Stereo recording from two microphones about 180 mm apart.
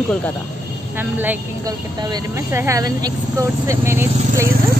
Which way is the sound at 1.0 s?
10° right (ahead or behind).